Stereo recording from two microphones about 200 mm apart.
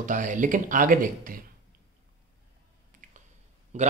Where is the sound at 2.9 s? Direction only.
40° right (ahead or behind).